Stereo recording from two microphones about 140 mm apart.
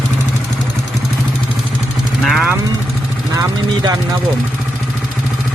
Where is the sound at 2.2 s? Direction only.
Centre (ahead or behind).